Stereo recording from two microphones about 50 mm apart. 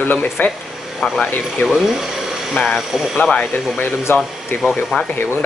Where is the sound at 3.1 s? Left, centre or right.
Centre.